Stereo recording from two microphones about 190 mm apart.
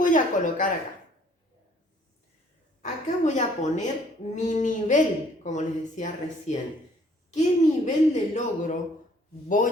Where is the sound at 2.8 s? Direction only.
40° left (ahead or behind).